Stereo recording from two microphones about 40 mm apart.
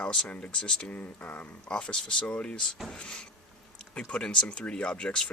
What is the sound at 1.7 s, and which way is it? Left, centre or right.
Speech, left.